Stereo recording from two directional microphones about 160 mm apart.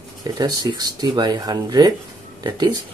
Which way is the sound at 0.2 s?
25° right (ahead or behind).